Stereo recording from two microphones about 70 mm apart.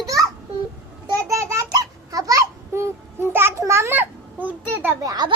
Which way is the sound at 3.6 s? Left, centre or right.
Right.